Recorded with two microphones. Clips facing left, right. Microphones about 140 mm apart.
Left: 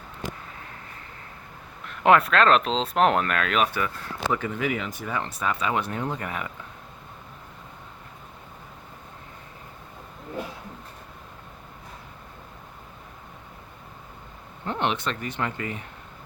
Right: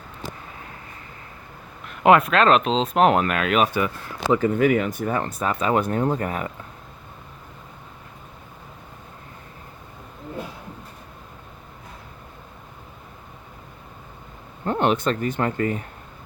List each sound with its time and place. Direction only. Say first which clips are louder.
2.0 s speech: right 3 dB; 5° right (ahead or behind)
4.4 s speech: right 9 dB; 45° right (ahead or behind)
14.6 s speech: right 6 dB; 45° right (ahead or behind)